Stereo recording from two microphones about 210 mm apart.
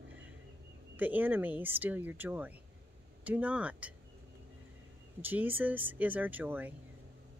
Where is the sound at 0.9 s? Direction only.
10° right (ahead or behind).